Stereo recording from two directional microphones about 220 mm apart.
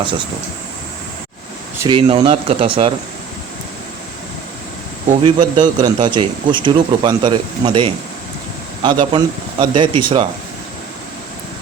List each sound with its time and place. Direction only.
1.8 s speech: 20° right (ahead or behind)
5.2 s speech: 20° right (ahead or behind)